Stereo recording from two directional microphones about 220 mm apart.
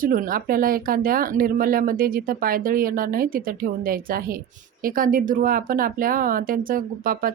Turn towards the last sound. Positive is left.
turn(degrees=-40)  # may be behind; listen again after turning